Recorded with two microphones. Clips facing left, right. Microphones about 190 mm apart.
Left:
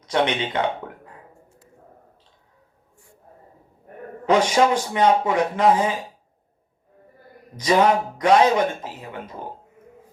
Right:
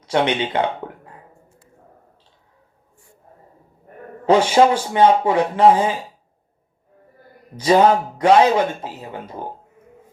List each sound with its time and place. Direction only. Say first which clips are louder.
0.0 s speech: right 3 dB; 30° right (ahead or behind)
4.3 s speech: right 4 dB; 30° right (ahead or behind)
7.6 s speech: right 4 dB; 30° right (ahead or behind)